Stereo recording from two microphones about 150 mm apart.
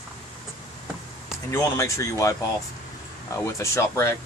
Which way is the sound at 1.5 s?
20° left (ahead or behind).